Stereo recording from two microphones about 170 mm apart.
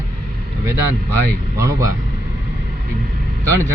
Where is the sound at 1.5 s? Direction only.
20° right (ahead or behind).